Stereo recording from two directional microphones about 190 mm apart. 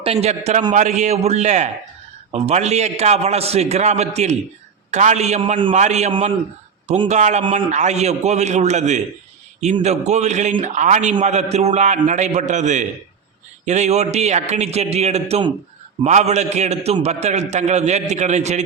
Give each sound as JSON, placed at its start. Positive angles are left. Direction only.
{"t": 0.0, "sound": "a man's voice", "side_deg": -35}
{"t": 5.7, "sound": "a man's voice", "side_deg": -35}